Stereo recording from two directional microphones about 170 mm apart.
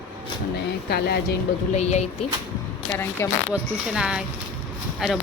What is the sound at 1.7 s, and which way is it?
Speech, 40° left (ahead or behind).